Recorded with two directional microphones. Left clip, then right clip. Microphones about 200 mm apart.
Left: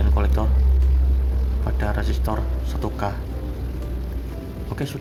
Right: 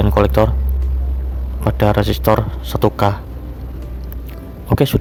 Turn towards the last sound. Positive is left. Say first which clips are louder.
# right 14 dB
turn(degrees=-55)  # may be behind; listen again after turning